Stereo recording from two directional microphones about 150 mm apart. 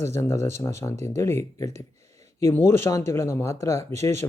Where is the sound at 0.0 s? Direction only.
20° left (ahead or behind).